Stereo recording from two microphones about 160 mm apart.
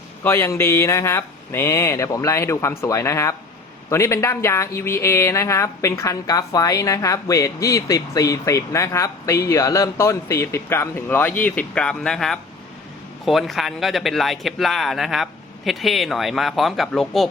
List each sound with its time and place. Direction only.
0.2 s speech: 15° left (ahead or behind)